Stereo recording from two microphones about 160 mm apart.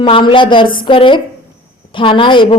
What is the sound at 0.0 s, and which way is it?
Speech, 35° left (ahead or behind).